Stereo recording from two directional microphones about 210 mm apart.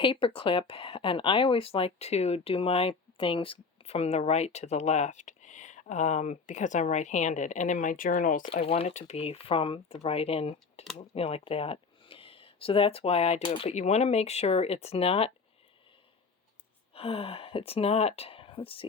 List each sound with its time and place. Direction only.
0.0 s speech: 25° left (ahead or behind); by 8.4 s 40° left (ahead or behind)
8.5 s speech: 30° left (ahead or behind)
16.9 s speech: 30° left (ahead or behind)